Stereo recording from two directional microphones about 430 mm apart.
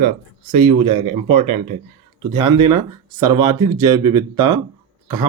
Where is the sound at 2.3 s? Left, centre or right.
Centre.